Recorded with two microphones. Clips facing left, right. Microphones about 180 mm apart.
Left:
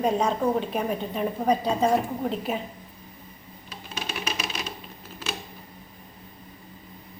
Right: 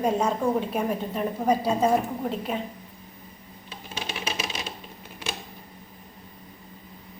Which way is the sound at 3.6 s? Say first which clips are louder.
Even; 25° right (ahead or behind).